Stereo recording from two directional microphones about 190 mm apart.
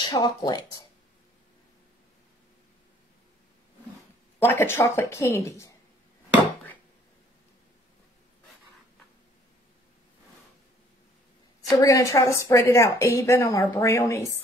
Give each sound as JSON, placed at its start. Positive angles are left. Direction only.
{"t": 0.0, "sound": "speech", "side_deg": 20}
{"t": 4.4, "sound": "a woman's voice", "side_deg": 10}
{"t": 11.8, "sound": "a woman's voice", "side_deg": 15}